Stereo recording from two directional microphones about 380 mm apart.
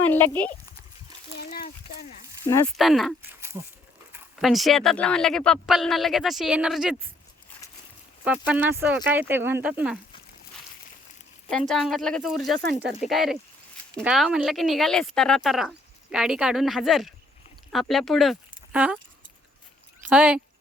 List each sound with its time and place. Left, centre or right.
0.0 s speech: centre
1.4 s a sound: left
2.4 s speech: centre
8.2 s speech: centre
11.4 s speech: centre
18.5 s a sound: centre
20.1 s speech: centre